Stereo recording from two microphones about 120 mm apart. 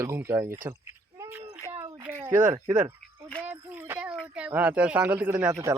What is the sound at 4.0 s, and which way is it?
Speech, 10° right (ahead or behind).